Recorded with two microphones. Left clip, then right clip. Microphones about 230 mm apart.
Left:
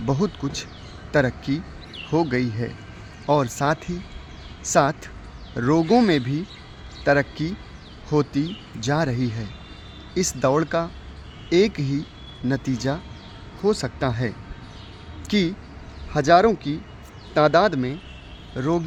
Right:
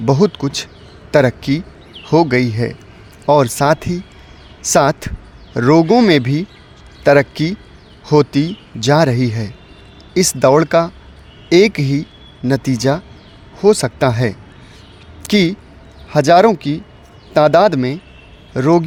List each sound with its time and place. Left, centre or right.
0.0 s speech: right